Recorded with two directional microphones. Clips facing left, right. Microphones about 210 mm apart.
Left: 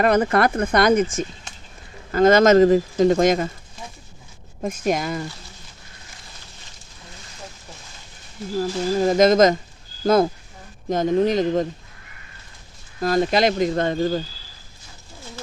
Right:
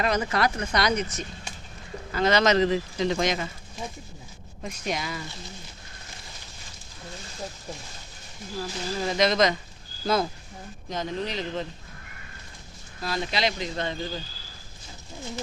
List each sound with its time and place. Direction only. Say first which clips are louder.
0.0 s speech: left 7 dB; 55° left (ahead or behind)
4.6 s speech: left 9 dB; 50° left (ahead or behind)
8.5 s speech: left 10 dB; 45° left (ahead or behind)
13.0 s speech: left 10 dB; 50° left (ahead or behind)